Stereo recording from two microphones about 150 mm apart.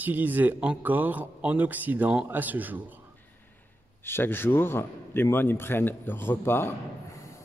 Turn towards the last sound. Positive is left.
turn(degrees=20)  # may be behind; listen again after turning